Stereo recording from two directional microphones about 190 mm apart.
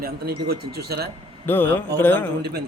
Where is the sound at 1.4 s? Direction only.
10° left (ahead or behind).